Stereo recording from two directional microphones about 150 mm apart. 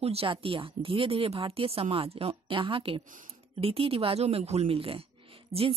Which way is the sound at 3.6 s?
40° right (ahead or behind).